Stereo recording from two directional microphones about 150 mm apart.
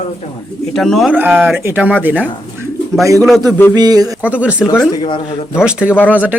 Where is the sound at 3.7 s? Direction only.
25° right (ahead or behind).